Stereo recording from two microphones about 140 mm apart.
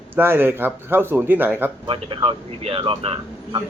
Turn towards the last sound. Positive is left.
turn(degrees=-35)  # may be behind; listen again after turning